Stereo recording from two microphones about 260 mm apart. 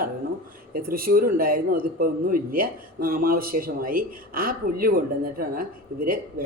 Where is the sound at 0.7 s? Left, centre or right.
Right.